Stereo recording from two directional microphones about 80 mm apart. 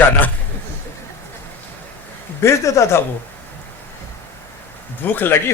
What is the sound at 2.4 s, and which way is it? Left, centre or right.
Speech, left.